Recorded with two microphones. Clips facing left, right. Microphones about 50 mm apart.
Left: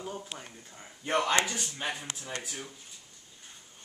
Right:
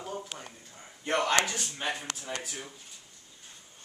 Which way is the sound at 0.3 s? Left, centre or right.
Centre.